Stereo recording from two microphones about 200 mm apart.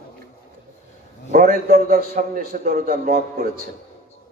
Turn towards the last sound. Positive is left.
turn(degrees=-45)  # may be behind; listen again after turning